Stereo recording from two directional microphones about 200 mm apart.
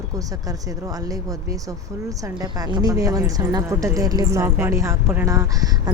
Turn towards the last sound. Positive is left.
turn(degrees=-15)  # may be behind; listen again after turning